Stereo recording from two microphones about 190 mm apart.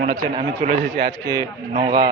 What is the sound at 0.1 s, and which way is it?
Speech, 30° right (ahead or behind).